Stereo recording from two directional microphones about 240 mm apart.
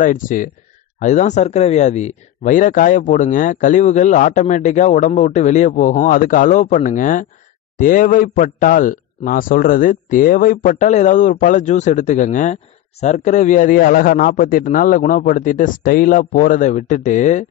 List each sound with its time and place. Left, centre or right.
0.0 s speech: left